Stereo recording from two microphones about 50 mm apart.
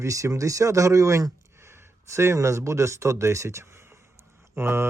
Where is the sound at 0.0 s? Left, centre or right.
Right.